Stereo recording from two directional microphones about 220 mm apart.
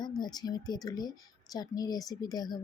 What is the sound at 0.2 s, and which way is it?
Speech, 20° left (ahead or behind).